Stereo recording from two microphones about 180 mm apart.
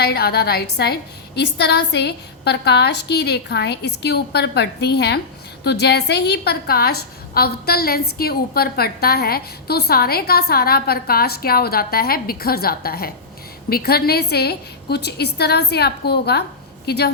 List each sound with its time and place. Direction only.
0.0 s a woman's voice: 60° left (ahead or behind)